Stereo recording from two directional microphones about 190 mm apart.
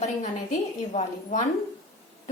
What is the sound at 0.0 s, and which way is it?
A woman's voice, 40° left (ahead or behind).